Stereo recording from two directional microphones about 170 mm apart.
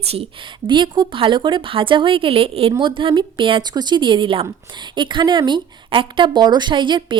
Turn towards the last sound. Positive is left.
turn(degrees=-30)  # may be behind; listen again after turning